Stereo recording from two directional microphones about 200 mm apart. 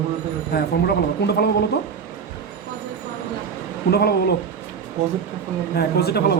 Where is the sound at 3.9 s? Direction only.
55° left (ahead or behind).